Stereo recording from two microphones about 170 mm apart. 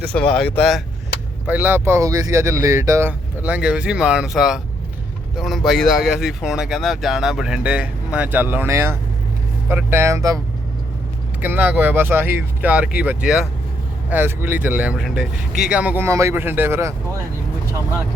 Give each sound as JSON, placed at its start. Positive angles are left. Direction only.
{"t": 0.1, "sound": "speech", "side_deg": 5}
{"t": 1.5, "sound": "speech", "side_deg": -10}
{"t": 11.3, "sound": "speech", "side_deg": -10}